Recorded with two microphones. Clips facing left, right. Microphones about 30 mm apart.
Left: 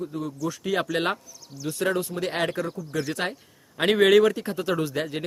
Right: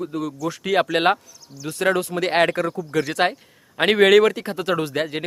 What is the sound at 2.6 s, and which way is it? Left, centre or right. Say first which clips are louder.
Speech: right 6 dB; right.